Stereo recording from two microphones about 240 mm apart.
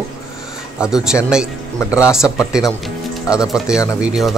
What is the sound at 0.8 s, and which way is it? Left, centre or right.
Speech, centre.